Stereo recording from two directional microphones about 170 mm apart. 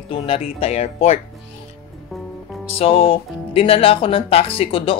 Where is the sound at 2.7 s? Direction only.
35° left (ahead or behind).